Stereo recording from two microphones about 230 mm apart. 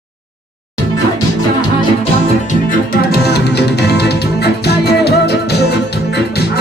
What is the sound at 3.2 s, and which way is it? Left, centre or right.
Music, left.